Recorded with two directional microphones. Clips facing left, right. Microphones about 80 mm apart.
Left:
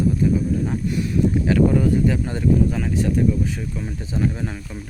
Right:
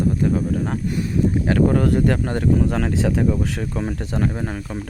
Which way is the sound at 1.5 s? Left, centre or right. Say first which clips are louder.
Even; right.